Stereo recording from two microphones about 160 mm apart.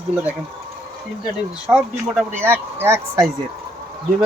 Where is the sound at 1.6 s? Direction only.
5° right (ahead or behind).